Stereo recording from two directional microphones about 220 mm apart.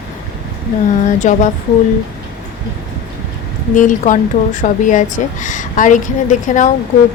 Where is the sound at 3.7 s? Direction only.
35° left (ahead or behind).